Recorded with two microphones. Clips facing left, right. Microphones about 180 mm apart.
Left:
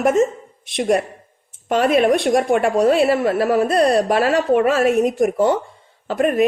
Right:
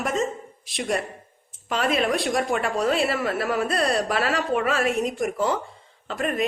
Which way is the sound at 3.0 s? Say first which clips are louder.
Left 8 dB; 35° left (ahead or behind).